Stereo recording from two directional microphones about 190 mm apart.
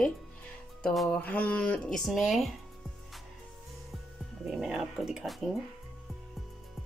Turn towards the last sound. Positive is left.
turn(degrees=0)  # may be behind; listen again after turning